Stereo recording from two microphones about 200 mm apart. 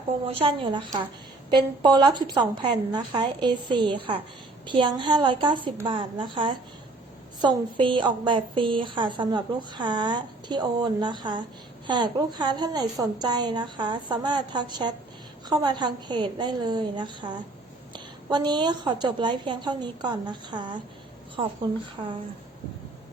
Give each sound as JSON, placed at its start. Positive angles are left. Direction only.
{"t": 0.3, "sound": "a woman's voice", "side_deg": -25}